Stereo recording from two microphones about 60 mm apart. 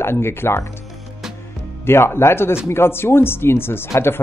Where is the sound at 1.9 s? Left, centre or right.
Left.